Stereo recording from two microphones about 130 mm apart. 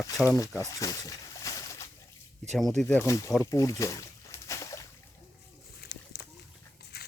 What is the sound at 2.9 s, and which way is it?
Speech, 20° left (ahead or behind).